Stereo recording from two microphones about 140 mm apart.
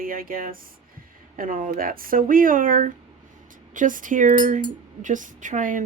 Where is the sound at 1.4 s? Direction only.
75° right (ahead or behind).